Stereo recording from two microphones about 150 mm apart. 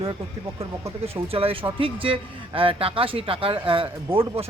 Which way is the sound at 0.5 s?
20° right (ahead or behind).